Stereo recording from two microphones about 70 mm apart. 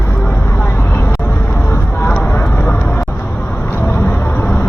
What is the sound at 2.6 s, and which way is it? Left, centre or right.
Vehicle, left.